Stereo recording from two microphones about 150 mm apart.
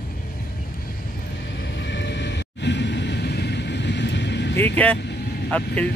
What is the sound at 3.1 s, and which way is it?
Vehicle, 90° left.